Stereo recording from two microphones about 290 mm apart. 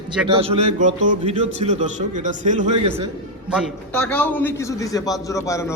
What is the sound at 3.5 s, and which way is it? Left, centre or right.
A man's voice, centre.